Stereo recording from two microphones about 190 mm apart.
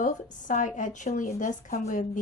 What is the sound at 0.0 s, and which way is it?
A woman's voice, 40° left (ahead or behind).